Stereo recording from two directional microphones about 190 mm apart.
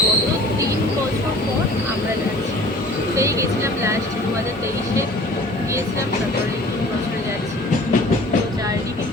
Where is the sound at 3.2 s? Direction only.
15° right (ahead or behind).